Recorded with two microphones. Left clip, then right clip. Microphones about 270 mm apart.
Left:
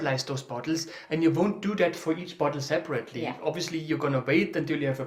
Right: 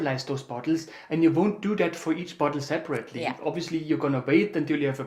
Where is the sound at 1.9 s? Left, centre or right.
Centre.